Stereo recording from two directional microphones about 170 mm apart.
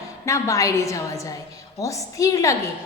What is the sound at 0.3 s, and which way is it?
A woman's voice, 15° left (ahead or behind).